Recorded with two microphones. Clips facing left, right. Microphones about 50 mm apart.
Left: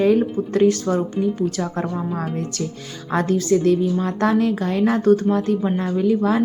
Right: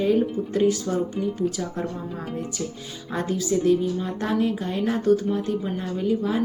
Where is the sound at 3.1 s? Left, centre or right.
Left.